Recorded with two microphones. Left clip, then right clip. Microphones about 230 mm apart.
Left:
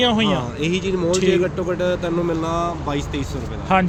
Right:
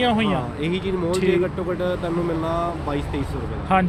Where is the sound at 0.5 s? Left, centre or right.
Left.